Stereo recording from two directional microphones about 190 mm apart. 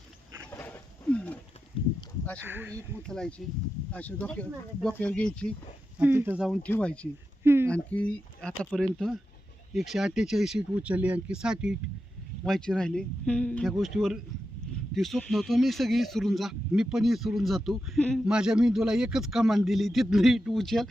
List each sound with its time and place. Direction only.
0.5 s wild animals: 10° left (ahead or behind)
2.4 s speech: 10° right (ahead or behind)
2.7 s speech: 5° left (ahead or behind)
6.0 s speech: 10° right (ahead or behind); by 7.1 s 5° left (ahead or behind)
7.4 s speech: 10° right (ahead or behind)
7.7 s speech: 5° left (ahead or behind)